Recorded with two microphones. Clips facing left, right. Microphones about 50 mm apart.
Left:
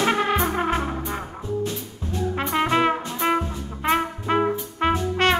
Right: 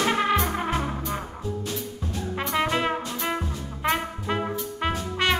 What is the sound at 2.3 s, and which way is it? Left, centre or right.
Brass instrument, left.